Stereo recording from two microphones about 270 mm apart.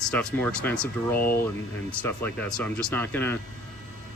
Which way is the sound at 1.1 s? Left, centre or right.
Left.